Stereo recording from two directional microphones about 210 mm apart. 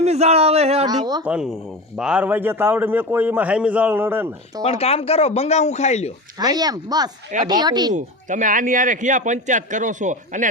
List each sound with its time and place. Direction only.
0.0 s a man's voice: 30° right (ahead or behind)
1.2 s a man's voice: 5° right (ahead or behind)
4.6 s speech: 30° left (ahead or behind)
6.4 s a man's voice: 20° right (ahead or behind)
7.9 s a man's voice: 35° right (ahead or behind)